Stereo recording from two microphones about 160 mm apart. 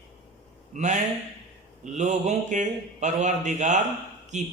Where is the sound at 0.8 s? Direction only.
50° right (ahead or behind).